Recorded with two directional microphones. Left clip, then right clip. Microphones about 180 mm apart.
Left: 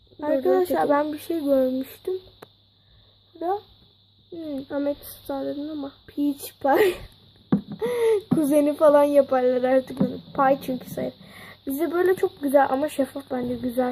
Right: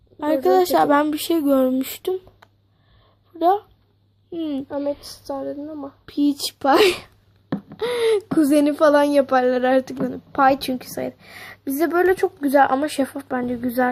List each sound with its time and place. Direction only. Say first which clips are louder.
0.2 s speech: right 4 dB; 30° right (ahead or behind)
3.3 s speech: right 9 dB; 40° right (ahead or behind)
4.7 s child singing: right 2 dB; 15° left (ahead or behind)
6.1 s a woman's voice: right 7 dB; 25° right (ahead or behind)